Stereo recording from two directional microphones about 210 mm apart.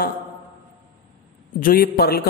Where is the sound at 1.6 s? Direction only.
45° left (ahead or behind).